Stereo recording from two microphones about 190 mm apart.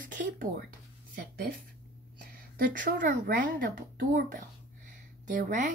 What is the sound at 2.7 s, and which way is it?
A woman's voice, 45° right (ahead or behind).